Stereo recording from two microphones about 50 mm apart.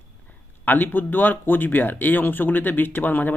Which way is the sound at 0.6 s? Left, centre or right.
Left.